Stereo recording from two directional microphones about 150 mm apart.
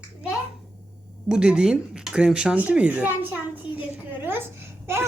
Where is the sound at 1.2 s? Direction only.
5° right (ahead or behind).